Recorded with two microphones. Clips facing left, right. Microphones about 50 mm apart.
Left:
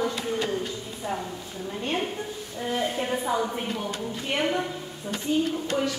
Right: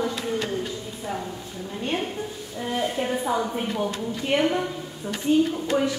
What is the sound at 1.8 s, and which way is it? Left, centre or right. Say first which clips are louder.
A woman's voice: right 2 dB; centre.